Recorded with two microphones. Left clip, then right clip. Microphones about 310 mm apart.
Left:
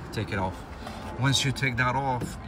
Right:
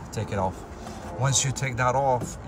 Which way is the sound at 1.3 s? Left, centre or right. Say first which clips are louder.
Left 1 dB; right.